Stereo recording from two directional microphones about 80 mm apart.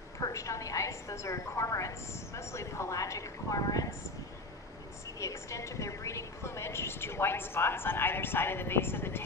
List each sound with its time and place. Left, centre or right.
0.2 s a woman's voice: left
5.2 s a woman's voice: left